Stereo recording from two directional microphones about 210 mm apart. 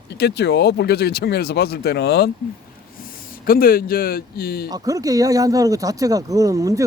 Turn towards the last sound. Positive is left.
turn(degrees=-15)  # may be behind; listen again after turning